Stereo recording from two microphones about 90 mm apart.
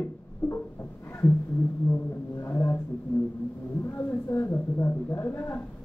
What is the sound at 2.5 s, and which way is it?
Speech, 25° left (ahead or behind).